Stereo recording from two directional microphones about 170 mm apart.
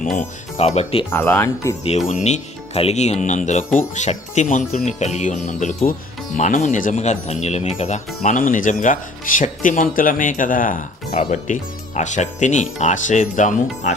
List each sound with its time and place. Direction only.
0.2 s speech: 40° left (ahead or behind)
1.1 s speech: 15° left (ahead or behind)
2.0 s speech: 45° left (ahead or behind)